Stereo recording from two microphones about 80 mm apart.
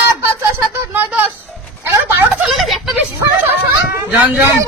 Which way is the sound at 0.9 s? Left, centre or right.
Right.